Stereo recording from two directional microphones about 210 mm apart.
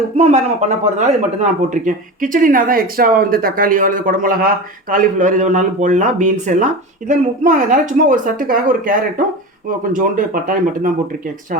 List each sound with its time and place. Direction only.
0.2 s speech: 30° right (ahead or behind)